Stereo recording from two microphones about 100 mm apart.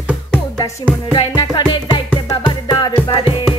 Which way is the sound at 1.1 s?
55° left (ahead or behind).